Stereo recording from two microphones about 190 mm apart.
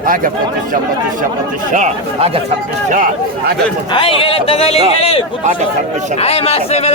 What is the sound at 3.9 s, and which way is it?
Speech, 30° left (ahead or behind).